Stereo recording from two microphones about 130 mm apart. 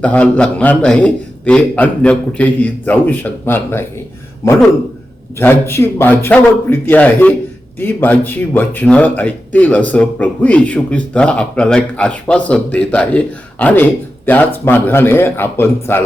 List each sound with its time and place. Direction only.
0.0 s speech: 10° left (ahead or behind)